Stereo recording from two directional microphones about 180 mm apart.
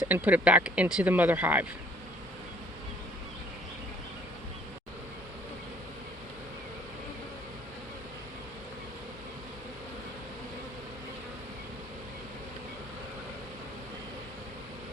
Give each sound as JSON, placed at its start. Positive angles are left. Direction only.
{"t": 0.0, "sound": "speech", "side_deg": -10}